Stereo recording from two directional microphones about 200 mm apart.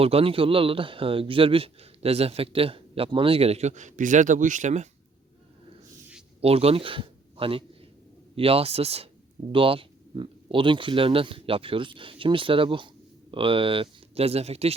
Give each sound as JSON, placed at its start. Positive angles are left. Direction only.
{"t": 0.0, "sound": "a man's voice", "side_deg": -30}
{"t": 6.4, "sound": "a man's voice", "side_deg": -30}